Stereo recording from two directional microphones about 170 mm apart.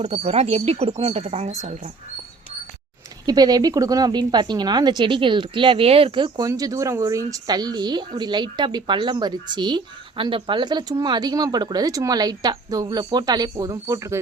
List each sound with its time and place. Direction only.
0.0 s speech: 35° right (ahead or behind)
3.2 s speech: 25° right (ahead or behind)